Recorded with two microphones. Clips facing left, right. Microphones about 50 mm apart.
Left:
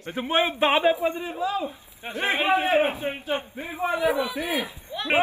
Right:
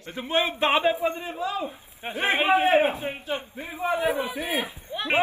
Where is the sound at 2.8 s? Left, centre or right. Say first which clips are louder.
Even; left.